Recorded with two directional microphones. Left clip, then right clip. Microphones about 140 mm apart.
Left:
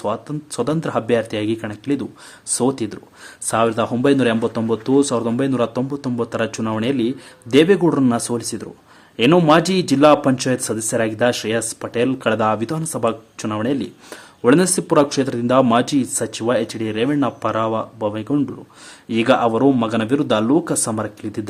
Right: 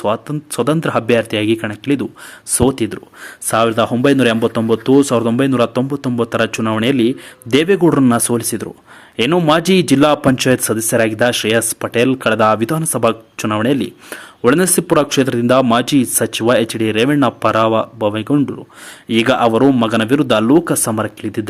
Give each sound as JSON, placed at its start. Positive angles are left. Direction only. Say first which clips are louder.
{"t": 0.0, "sound": "a man's voice", "louder": "right 5 dB", "side_deg": -25}